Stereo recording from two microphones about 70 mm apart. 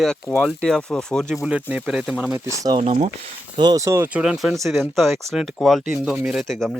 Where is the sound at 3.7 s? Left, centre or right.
Right.